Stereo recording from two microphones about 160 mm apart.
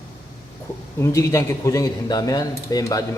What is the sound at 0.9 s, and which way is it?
Speech, 15° left (ahead or behind).